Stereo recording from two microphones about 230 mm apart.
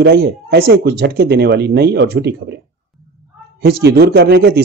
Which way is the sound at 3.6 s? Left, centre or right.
Right.